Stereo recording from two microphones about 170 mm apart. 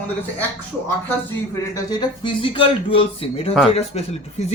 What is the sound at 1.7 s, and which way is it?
Speech, 25° left (ahead or behind).